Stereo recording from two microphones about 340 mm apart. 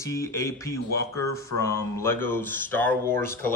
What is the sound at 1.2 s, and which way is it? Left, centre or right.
Speech, left.